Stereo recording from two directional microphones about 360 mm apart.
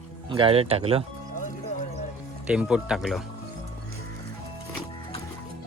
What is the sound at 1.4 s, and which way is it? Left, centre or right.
Music, left.